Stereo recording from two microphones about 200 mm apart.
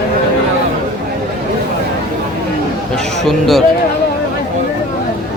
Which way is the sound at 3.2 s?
Centre (ahead or behind).